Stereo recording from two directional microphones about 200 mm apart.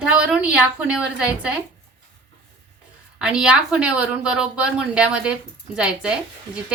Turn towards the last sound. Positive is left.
turn(degrees=-5)  # may be behind; listen again after turning